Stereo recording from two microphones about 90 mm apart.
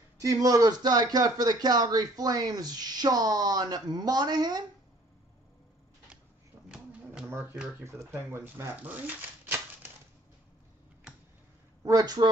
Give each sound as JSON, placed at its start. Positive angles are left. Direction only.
{"t": 0.2, "sound": "speech", "side_deg": -40}
{"t": 6.7, "sound": "a sound", "side_deg": -15}
{"t": 7.2, "sound": "speech", "side_deg": -25}
{"t": 8.7, "sound": "typewriter", "side_deg": -20}
{"t": 11.8, "sound": "speech", "side_deg": -45}